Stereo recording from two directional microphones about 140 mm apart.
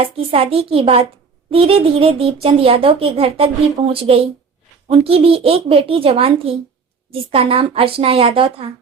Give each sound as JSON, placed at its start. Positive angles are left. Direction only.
{"t": 0.0, "sound": "a child's voice", "side_deg": -45}